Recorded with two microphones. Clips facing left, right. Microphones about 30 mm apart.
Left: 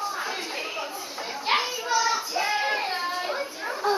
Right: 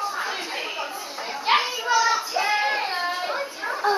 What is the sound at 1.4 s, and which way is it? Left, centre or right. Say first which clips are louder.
Child singing: right 4 dB; centre.